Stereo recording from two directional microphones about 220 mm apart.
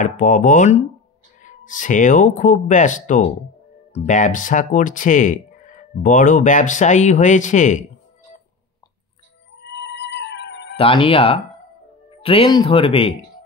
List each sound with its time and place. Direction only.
0.0 s speech: 40° left (ahead or behind)
9.6 s music: 50° left (ahead or behind)
10.8 s speech: 25° left (ahead or behind)